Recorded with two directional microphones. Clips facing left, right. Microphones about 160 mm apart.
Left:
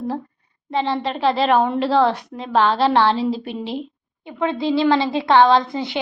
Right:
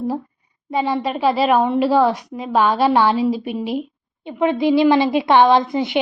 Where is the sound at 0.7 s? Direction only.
10° right (ahead or behind).